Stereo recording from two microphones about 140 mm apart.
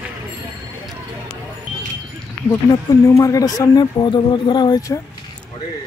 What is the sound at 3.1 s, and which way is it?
Speech, 25° left (ahead or behind).